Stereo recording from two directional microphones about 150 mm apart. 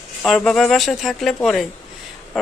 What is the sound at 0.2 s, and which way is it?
Speech, 5° left (ahead or behind).